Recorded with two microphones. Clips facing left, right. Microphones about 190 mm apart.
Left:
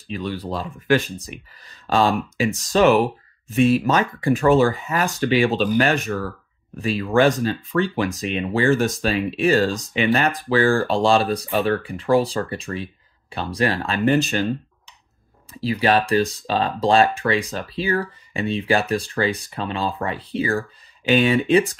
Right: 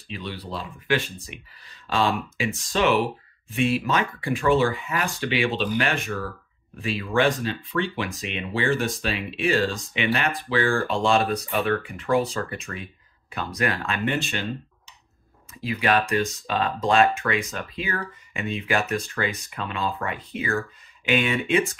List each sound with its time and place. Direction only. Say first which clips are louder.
0.1 s speech: left 6 dB; 45° left (ahead or behind)
15.6 s speech: left 4 dB; 35° left (ahead or behind)